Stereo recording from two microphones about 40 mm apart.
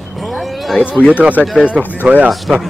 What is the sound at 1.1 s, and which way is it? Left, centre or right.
Speech, right.